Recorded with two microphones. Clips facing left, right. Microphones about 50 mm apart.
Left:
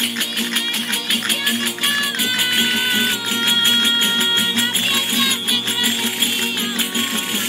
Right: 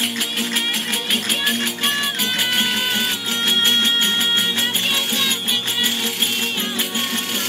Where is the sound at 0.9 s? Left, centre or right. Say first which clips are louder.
Left 1 dB; centre.